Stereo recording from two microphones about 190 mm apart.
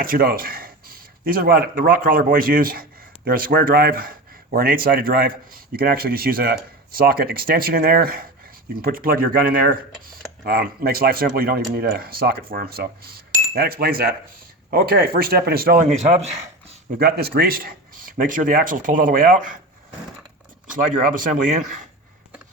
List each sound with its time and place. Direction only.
0.0 s speech: 50° right (ahead or behind)
15.9 s speech: 35° right (ahead or behind)
17.0 s speech: 55° right (ahead or behind)
20.7 s speech: 45° right (ahead or behind)